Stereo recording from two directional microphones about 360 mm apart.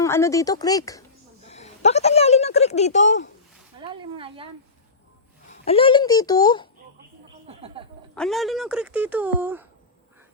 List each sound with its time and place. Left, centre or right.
0.0 s a child's voice: centre
3.8 s speech: centre
5.5 s a child's voice: centre
7.4 s a sound: centre
8.1 s speech: centre